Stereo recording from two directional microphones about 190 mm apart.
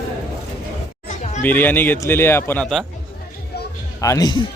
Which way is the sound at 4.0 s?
20° left (ahead or behind).